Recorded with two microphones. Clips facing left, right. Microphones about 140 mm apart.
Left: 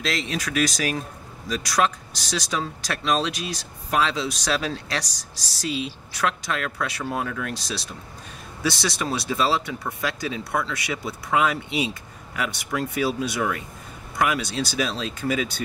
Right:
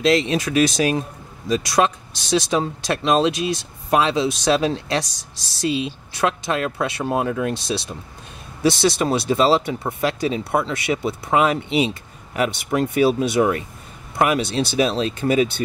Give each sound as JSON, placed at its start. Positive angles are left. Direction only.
{"t": 0.3, "sound": "speech", "side_deg": -25}